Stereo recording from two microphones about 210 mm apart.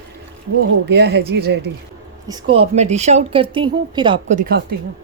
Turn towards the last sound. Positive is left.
turn(degrees=-45)  # may be behind; listen again after turning